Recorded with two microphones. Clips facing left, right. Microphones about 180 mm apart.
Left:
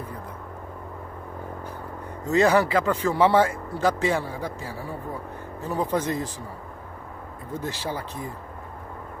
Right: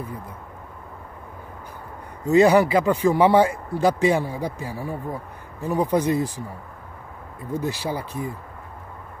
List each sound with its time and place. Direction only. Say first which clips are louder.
2.2 s speech: right 4 dB; 15° right (ahead or behind)
7.5 s speech: right 4 dB; 15° right (ahead or behind)